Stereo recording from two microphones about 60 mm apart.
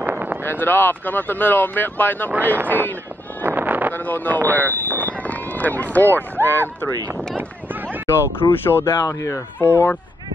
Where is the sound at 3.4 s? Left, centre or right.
Right.